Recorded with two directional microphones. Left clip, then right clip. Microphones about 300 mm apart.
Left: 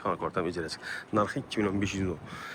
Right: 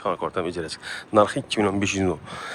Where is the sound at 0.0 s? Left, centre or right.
Centre.